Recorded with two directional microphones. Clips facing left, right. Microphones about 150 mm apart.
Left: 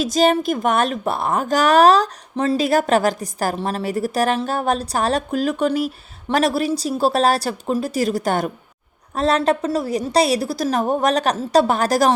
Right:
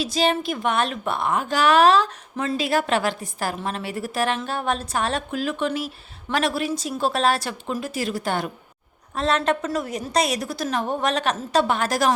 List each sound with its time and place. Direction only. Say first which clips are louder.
0.0 s a woman's voice: left 5 dB; 45° left (ahead or behind)